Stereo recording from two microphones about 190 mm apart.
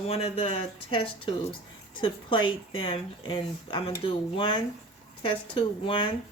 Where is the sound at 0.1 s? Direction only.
30° left (ahead or behind).